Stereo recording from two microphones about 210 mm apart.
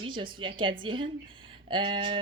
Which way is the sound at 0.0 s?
25° right (ahead or behind).